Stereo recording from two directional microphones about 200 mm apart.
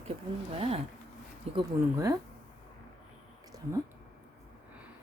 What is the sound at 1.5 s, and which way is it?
Speech, 15° right (ahead or behind).